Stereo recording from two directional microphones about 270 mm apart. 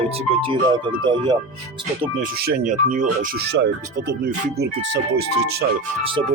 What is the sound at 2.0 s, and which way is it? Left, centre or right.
Speech, right.